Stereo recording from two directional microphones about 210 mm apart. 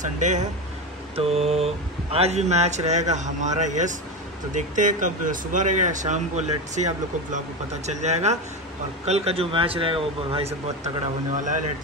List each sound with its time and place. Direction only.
0.0 s speech: 35° right (ahead or behind)
11.4 s speech: 35° right (ahead or behind)